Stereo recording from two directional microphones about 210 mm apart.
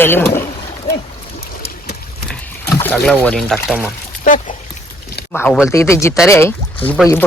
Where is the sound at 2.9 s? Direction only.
5° left (ahead or behind).